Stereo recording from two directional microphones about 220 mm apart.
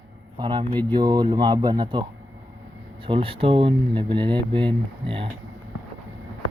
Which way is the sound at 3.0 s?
25° right (ahead or behind).